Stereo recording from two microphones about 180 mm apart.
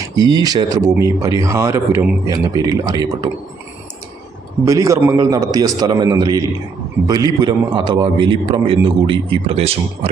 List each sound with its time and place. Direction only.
0.2 s a man's voice: 20° right (ahead or behind)
4.6 s a man's voice: 20° right (ahead or behind)
7.4 s a man's voice: 25° right (ahead or behind)